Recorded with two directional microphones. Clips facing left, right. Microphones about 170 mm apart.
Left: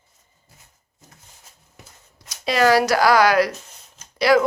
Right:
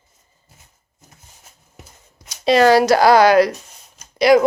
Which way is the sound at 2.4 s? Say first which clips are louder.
Right 5 dB; 25° right (ahead or behind).